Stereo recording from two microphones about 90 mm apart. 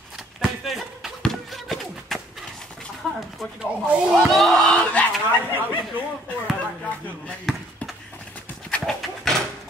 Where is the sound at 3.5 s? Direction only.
15° right (ahead or behind).